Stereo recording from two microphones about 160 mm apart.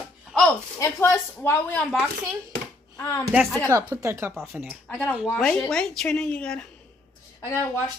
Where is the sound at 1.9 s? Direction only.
Centre (ahead or behind).